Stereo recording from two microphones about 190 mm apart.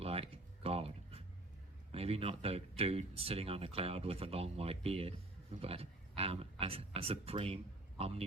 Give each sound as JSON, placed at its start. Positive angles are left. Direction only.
{"t": 0.0, "sound": "music", "side_deg": -30}
{"t": 1.9, "sound": "speech", "side_deg": -30}